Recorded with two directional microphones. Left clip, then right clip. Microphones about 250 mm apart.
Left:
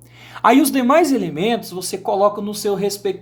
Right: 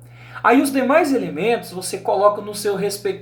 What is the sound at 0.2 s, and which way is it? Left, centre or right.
Speech, left.